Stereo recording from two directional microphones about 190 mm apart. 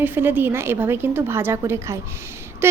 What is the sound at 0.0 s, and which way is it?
A woman's voice, 10° right (ahead or behind).